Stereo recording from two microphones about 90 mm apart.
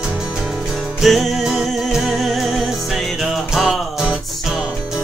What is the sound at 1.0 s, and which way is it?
Music, centre (ahead or behind).